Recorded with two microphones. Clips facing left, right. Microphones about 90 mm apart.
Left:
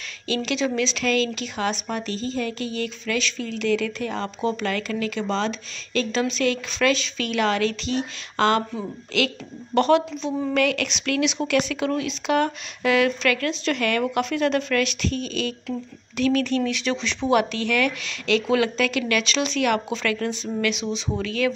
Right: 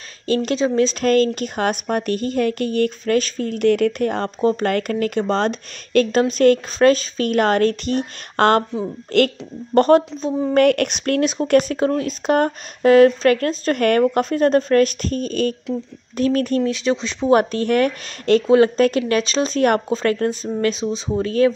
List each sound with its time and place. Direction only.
0.3 s speech: 45° right (ahead or behind)